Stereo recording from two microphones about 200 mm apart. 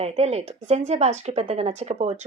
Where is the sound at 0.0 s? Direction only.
30° right (ahead or behind).